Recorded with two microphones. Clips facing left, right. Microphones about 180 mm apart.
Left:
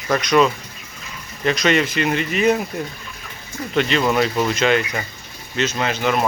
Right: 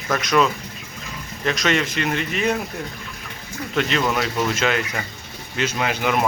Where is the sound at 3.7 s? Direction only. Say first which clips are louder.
Left 4 dB; centre (ahead or behind).